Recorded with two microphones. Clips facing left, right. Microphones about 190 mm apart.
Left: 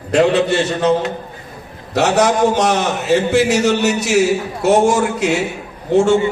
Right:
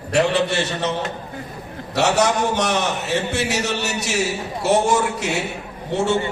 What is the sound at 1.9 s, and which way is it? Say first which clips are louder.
A man's voice: left 4 dB; 60° left (ahead or behind).